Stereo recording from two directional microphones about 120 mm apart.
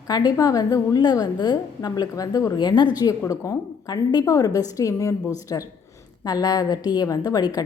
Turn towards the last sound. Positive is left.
turn(degrees=30)  # may be behind; listen again after turning